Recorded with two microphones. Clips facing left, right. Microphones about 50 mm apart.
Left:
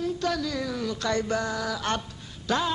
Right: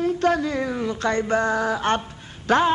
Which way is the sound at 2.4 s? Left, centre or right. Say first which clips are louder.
Right 8 dB; right.